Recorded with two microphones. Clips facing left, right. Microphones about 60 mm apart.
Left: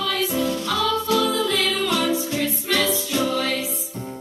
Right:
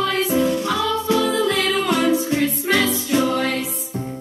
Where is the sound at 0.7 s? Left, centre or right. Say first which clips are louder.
Right 1 dB; right.